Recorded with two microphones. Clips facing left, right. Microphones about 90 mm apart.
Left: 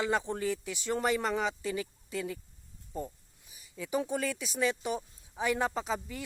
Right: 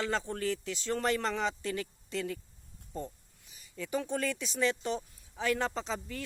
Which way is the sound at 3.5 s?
10° left (ahead or behind).